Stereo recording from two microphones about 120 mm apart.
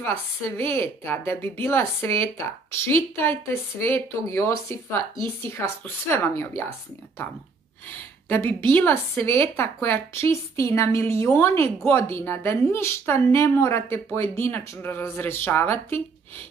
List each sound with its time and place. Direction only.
0.4 s a woman's voice: 20° left (ahead or behind)
7.9 s a woman's voice: 15° left (ahead or behind)